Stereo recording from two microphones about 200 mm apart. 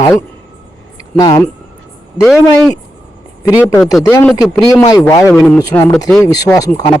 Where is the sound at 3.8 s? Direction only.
Centre (ahead or behind).